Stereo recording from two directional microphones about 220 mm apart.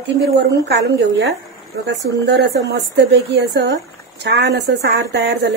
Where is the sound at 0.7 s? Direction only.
50° right (ahead or behind).